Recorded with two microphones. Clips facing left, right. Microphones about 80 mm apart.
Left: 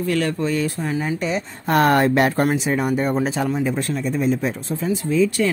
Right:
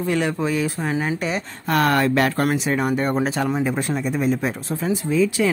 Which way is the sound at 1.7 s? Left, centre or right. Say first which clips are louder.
Left 2 dB; left.